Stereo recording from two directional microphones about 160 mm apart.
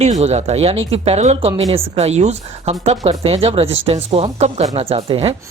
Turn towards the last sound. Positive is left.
turn(degrees=-40)  # may be behind; listen again after turning